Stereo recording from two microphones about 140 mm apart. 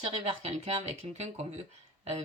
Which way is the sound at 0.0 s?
50° right (ahead or behind).